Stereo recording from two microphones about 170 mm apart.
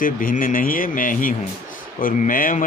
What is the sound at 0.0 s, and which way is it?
Speech, 50° left (ahead or behind).